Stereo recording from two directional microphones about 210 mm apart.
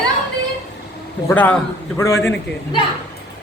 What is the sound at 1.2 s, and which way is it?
A man's voice, 5° left (ahead or behind).